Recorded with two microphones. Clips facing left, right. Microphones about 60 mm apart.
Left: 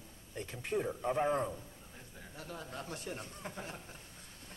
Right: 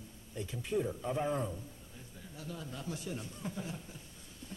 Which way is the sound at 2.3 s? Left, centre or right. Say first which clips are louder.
Even; left.